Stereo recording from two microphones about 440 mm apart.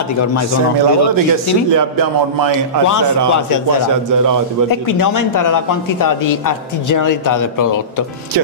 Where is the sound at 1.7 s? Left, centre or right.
Right.